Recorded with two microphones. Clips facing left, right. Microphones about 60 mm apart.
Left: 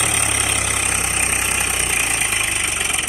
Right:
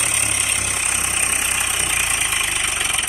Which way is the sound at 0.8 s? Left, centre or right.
Left.